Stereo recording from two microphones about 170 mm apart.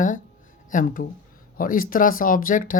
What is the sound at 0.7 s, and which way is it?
Speech, 50° left (ahead or behind).